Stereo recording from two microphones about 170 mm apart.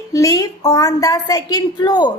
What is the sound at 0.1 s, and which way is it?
A woman's voice, 20° left (ahead or behind).